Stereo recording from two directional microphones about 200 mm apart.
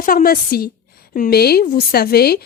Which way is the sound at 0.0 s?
45° left (ahead or behind).